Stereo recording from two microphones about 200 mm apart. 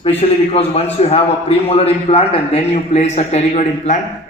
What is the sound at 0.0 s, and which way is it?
A man's voice, 30° left (ahead or behind).